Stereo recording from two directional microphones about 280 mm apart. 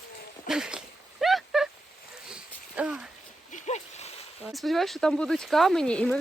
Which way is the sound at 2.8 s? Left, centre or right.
Centre.